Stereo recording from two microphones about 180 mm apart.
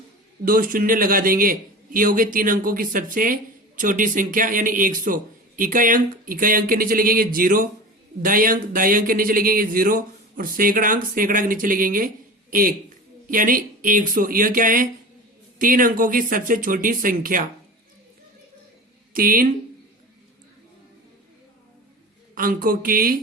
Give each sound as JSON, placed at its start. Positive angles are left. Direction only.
{"t": 0.4, "sound": "speech", "side_deg": -50}
{"t": 19.1, "sound": "speech", "side_deg": -50}
{"t": 22.4, "sound": "speech", "side_deg": -50}